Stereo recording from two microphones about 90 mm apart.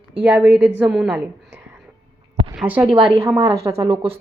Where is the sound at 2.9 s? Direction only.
75° right (ahead or behind).